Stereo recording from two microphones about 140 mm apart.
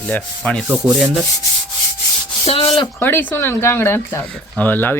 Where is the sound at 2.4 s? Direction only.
45° left (ahead or behind).